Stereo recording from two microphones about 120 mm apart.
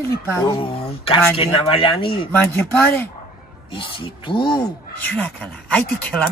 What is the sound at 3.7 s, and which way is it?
Speech, 45° left (ahead or behind).